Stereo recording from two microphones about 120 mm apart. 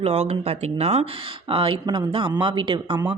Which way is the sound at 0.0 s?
60° right (ahead or behind).